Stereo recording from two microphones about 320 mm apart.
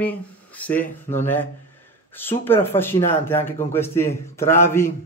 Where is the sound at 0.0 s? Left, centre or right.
Centre.